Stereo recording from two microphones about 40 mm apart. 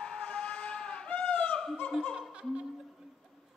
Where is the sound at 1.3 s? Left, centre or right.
Left.